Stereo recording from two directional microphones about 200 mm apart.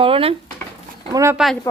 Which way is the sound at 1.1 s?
15° right (ahead or behind).